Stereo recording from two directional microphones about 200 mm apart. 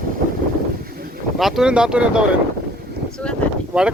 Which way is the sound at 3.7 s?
5° right (ahead or behind).